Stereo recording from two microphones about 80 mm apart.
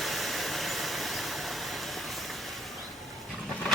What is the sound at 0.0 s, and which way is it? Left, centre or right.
Vehicle, centre.